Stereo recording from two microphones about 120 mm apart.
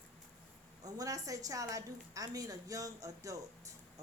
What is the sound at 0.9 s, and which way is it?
A woman's voice, 30° right (ahead or behind).